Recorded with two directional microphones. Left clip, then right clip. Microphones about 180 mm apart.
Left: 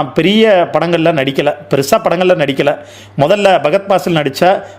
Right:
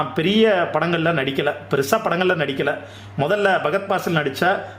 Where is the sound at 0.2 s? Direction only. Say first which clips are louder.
Left 8 dB; 30° left (ahead or behind).